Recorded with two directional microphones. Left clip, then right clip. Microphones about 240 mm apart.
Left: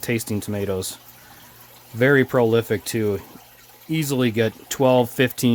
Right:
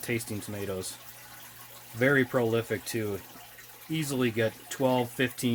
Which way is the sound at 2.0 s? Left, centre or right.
Left.